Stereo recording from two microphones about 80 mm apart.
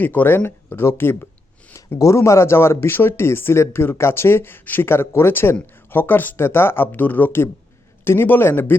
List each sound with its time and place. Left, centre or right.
0.0 s speech: left
1.7 s speech: left